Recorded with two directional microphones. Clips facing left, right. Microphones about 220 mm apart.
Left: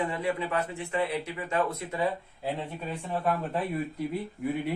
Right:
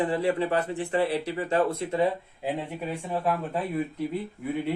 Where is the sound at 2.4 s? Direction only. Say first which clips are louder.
Right 3 dB; 15° right (ahead or behind).